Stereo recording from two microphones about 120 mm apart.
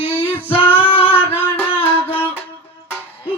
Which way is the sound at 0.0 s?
15° right (ahead or behind).